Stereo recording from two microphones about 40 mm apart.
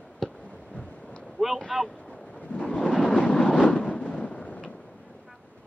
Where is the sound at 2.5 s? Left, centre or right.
Left.